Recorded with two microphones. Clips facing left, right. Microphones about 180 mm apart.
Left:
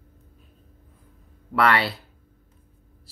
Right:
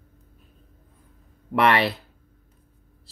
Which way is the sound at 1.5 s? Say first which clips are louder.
Right 1 dB; 20° right (ahead or behind).